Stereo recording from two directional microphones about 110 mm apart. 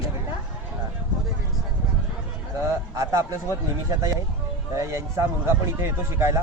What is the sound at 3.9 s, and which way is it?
A man's voice, 30° right (ahead or behind).